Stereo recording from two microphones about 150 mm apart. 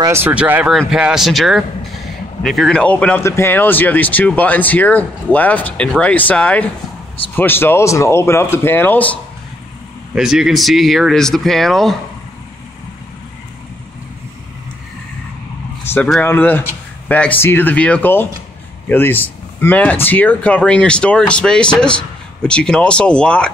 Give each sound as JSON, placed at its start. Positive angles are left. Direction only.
{"t": 0.0, "sound": "speech", "side_deg": -15}
{"t": 10.1, "sound": "speech", "side_deg": -5}
{"t": 15.8, "sound": "vehicle", "side_deg": 15}
{"t": 16.1, "sound": "speech", "side_deg": 10}